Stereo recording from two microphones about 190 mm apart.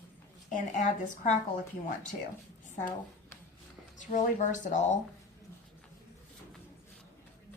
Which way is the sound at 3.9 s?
40° left (ahead or behind).